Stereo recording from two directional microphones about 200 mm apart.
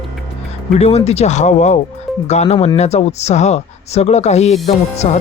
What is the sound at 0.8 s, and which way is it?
Speech, 30° left (ahead or behind).